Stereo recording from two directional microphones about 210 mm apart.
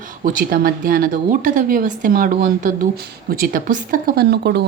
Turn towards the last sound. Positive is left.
turn(degrees=-50)  # may be behind; listen again after turning